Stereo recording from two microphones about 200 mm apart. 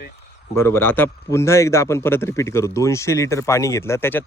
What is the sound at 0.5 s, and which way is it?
Speech, 10° left (ahead or behind).